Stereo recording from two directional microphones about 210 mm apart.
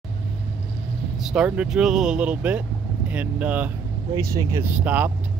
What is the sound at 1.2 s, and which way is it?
Speech, 5° right (ahead or behind).